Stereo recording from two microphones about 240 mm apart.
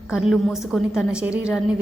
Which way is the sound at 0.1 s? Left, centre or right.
Centre.